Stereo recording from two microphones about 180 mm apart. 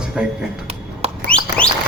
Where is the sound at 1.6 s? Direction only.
5° left (ahead or behind).